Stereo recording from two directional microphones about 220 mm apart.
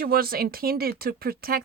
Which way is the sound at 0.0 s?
40° right (ahead or behind).